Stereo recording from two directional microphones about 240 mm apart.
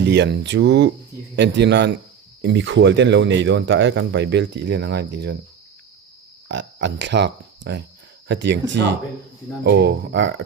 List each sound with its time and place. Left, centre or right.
0.0 s speech: right
6.5 s speech: right